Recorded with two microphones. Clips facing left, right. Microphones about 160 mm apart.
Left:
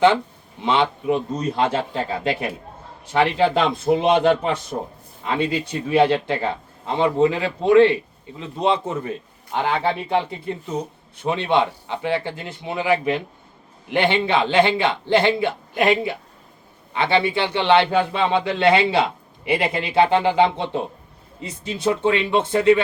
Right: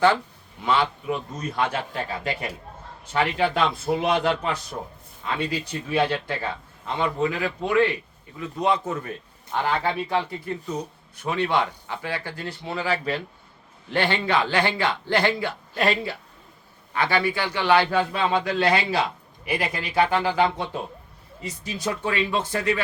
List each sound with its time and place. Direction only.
0.6 s a man's voice: 25° left (ahead or behind)
4.7 s speech: 35° left (ahead or behind)
5.4 s a man's voice: 25° left (ahead or behind)